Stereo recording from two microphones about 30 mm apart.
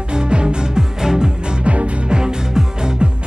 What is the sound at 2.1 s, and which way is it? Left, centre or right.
Music, right.